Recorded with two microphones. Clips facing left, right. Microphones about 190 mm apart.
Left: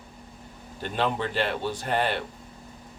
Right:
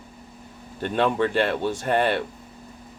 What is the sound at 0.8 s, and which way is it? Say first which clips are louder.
Speech: right 5 dB; 55° right (ahead or behind).